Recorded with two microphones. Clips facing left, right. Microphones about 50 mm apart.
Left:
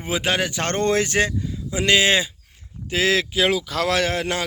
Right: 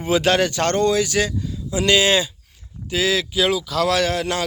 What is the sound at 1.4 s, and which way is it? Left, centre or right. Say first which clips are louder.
Speech: right 2 dB; left.